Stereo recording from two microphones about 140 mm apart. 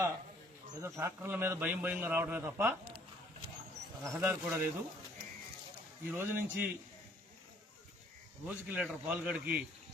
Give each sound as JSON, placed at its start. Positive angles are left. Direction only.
{"t": 0.8, "sound": "a man's voice", "side_deg": -20}
{"t": 4.0, "sound": "a man's voice", "side_deg": -15}
{"t": 6.1, "sound": "a man's voice", "side_deg": -15}
{"t": 8.4, "sound": "a man's voice", "side_deg": -10}